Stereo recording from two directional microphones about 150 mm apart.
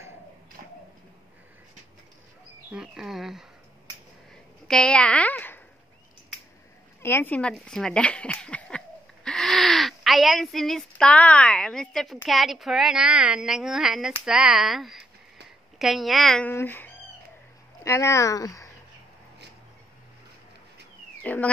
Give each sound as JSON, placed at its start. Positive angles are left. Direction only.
{"t": 2.7, "sound": "speech", "side_deg": -5}
{"t": 4.6, "sound": "a woman's voice", "side_deg": 5}
{"t": 7.0, "sound": "speech", "side_deg": 15}
{"t": 16.4, "sound": "speech", "side_deg": 15}
{"t": 21.2, "sound": "a sound", "side_deg": 10}